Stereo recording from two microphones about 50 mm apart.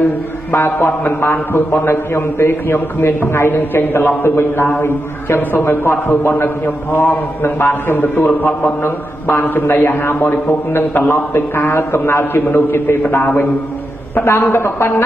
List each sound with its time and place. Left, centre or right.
0.5 s a man's voice: left
5.5 s a man's voice: left
5.9 s a man's voice: left
8.8 s a man's voice: left
14.2 s a man's voice: left